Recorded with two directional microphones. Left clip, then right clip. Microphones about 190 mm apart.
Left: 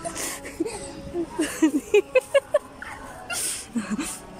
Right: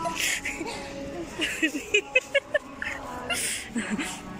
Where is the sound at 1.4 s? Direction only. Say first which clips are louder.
Left 3 dB; 30° left (ahead or behind).